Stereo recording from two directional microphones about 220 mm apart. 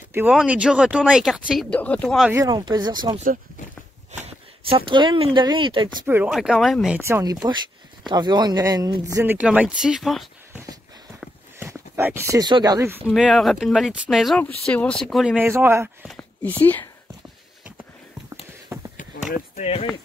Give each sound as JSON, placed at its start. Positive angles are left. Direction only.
{"t": 0.1, "sound": "speech", "side_deg": -5}
{"t": 2.3, "sound": "speech", "side_deg": -15}
{"t": 6.0, "sound": "speech", "side_deg": -5}
{"t": 7.0, "sound": "speech", "side_deg": -10}
{"t": 11.1, "sound": "a sound", "side_deg": -10}
{"t": 13.1, "sound": "speech", "side_deg": 0}
{"t": 16.1, "sound": "speech", "side_deg": 10}
{"t": 18.7, "sound": "a sound", "side_deg": -10}
{"t": 19.3, "sound": "speech", "side_deg": 30}